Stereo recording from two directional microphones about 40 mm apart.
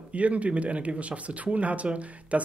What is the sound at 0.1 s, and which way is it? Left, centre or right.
Speech, right.